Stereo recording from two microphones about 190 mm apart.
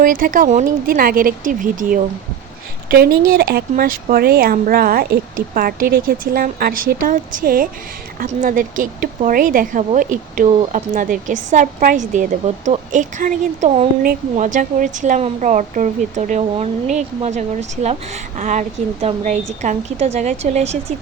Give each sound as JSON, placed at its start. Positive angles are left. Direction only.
{"t": 0.0, "sound": "speech", "side_deg": -45}